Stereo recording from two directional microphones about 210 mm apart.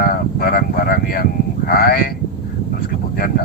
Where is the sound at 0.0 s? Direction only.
45° left (ahead or behind).